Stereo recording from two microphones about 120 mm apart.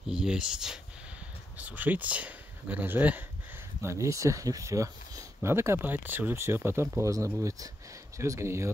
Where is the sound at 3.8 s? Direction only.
25° right (ahead or behind).